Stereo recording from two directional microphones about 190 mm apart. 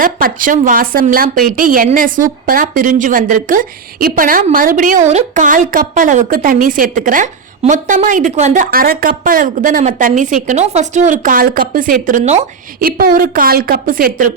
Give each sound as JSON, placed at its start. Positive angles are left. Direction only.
{"t": 0.0, "sound": "a woman's voice", "side_deg": -45}
{"t": 8.7, "sound": "a woman's voice", "side_deg": -50}
{"t": 11.1, "sound": "a woman's voice", "side_deg": -45}
{"t": 12.8, "sound": "a woman's voice", "side_deg": -50}